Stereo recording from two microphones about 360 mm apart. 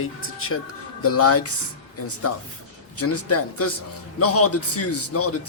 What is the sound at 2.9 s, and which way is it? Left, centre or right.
A man's voice, left.